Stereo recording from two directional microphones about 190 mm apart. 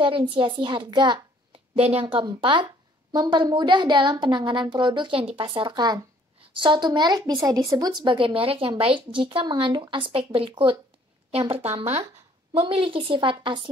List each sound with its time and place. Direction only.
0.0 s a woman's voice: 25° right (ahead or behind)
12.5 s a woman's voice: 30° right (ahead or behind)